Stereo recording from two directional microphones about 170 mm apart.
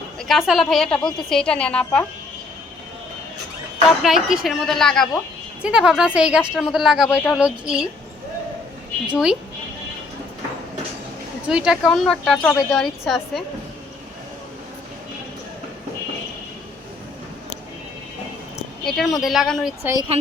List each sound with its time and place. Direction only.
0.2 s a woman's voice: centre (ahead or behind)
3.8 s a woman's voice: centre (ahead or behind)
9.1 s a woman's voice: 5° right (ahead or behind)
11.4 s a woman's voice: 5° right (ahead or behind)
18.9 s a woman's voice: centre (ahead or behind)
19.8 s a woman's voice: 15° right (ahead or behind)